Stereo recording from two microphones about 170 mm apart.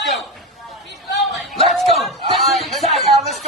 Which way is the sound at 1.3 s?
Centre (ahead or behind).